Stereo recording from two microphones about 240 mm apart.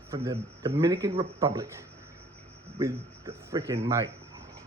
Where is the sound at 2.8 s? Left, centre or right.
Centre.